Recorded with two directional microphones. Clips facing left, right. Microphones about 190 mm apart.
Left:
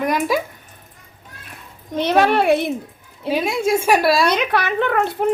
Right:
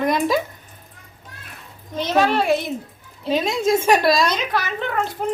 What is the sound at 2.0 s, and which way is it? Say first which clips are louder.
Speech: left 3 dB; 60° left (ahead or behind).